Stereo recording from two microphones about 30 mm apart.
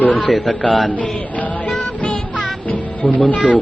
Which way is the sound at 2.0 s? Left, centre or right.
Left.